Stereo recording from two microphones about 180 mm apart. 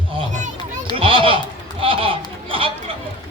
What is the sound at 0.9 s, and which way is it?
Children playing, 30° right (ahead or behind).